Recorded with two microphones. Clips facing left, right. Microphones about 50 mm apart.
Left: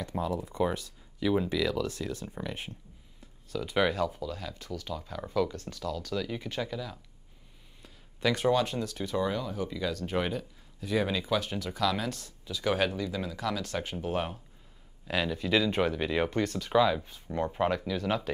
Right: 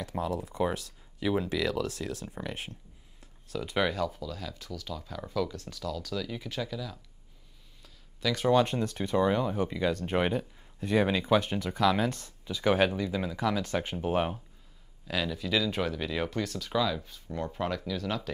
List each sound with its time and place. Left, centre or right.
0.0 s speech: centre
7.8 s a sound: left
8.5 s speech: centre
15.0 s speech: centre